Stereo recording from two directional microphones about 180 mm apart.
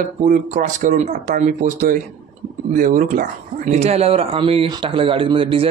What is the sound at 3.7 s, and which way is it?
Speech, 35° right (ahead or behind).